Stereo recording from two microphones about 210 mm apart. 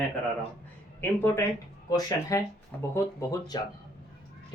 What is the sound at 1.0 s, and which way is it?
Speech, 10° left (ahead or behind).